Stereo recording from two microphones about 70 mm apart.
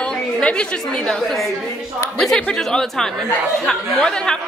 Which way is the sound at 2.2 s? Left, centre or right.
Centre.